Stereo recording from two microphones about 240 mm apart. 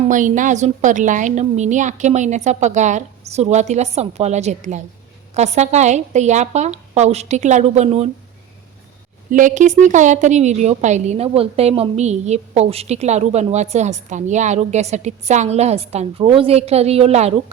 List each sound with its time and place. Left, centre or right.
0.0 s a woman's voice: right
9.3 s a woman's voice: right